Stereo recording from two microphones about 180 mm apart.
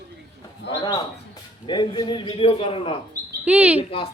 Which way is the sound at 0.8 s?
20° left (ahead or behind).